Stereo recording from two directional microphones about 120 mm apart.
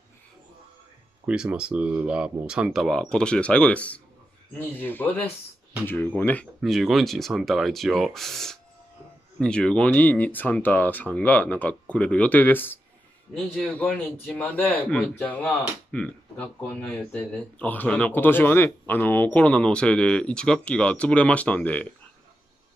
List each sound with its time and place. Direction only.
1.2 s speech: 10° right (ahead or behind); by 6.4 s 15° left (ahead or behind)
6.6 s speech: centre (ahead or behind)